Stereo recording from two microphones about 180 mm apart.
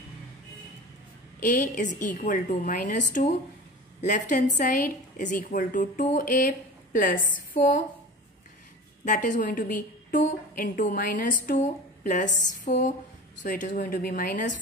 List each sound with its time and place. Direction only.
1.4 s a woman's voice: 45° left (ahead or behind)
9.0 s a woman's voice: 45° left (ahead or behind)